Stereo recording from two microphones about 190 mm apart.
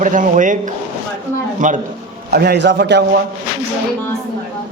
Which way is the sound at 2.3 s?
55° right (ahead or behind).